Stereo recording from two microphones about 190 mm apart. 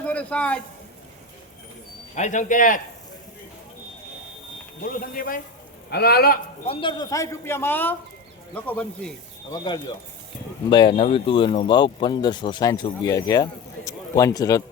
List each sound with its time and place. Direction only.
0.0 s speech: 5° left (ahead or behind)
2.1 s speech: 40° left (ahead or behind)
4.8 s a man's voice: 50° left (ahead or behind)
6.7 s a man's voice: 25° left (ahead or behind); by 9.1 s 5° left (ahead or behind)
9.5 s speech: 20° left (ahead or behind)